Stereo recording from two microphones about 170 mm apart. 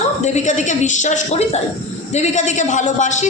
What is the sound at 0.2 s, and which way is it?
A woman's voice, 45° left (ahead or behind).